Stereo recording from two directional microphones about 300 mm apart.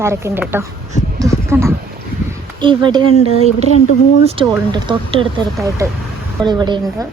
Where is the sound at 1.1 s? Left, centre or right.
Centre.